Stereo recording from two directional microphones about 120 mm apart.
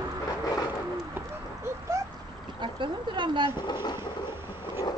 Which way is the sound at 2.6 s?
40° right (ahead or behind).